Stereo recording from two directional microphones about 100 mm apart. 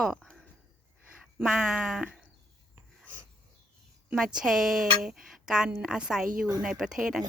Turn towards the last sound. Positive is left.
turn(degrees=-5)  # may be behind; listen again after turning